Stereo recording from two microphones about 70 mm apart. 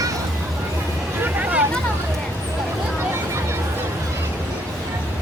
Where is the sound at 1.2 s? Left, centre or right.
Right.